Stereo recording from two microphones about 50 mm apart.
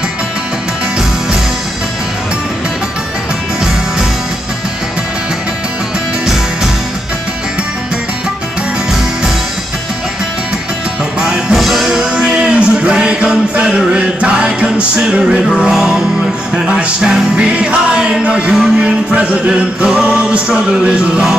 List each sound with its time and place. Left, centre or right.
11.1 s music: centre